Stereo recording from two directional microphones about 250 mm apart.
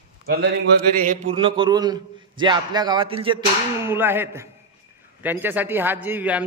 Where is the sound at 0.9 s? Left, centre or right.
Right.